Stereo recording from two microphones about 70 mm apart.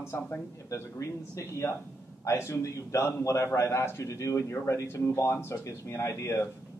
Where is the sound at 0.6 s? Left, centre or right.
Left.